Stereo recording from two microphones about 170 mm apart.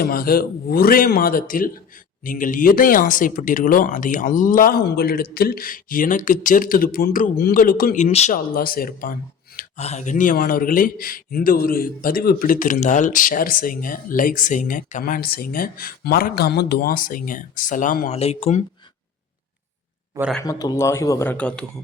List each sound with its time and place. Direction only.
0.0 s speech: 60° left (ahead or behind)
8.5 s speech: 60° left (ahead or behind)
9.6 s speech: 40° left (ahead or behind)
18.1 s speech: 40° left (ahead or behind)
20.4 s speech: 20° left (ahead or behind)